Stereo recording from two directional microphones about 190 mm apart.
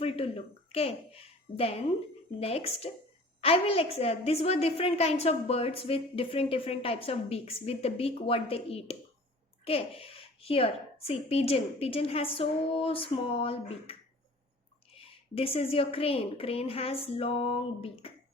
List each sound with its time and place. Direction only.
0.7 s a child's voice: 30° left (ahead or behind)
14.9 s a woman's voice: 30° left (ahead or behind)